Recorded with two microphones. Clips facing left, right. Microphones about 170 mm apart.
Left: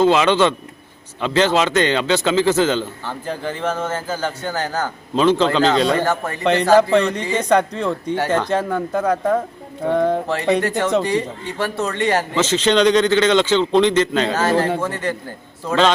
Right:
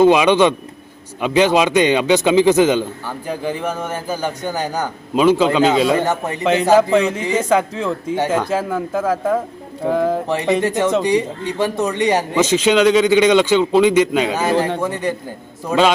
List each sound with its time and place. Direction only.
0.0 s a man's voice: 15° right (ahead or behind)
6.0 s a man's voice: 20° right (ahead or behind)
6.4 s speech: centre (ahead or behind)
10.2 s a man's voice: 20° right (ahead or behind)